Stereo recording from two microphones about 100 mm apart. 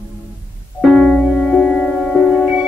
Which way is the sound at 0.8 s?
5° right (ahead or behind).